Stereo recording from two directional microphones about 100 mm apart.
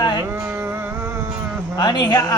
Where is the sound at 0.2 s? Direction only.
25° right (ahead or behind).